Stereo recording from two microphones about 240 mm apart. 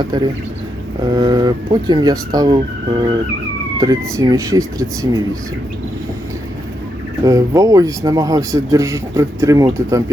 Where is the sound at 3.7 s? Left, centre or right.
Centre.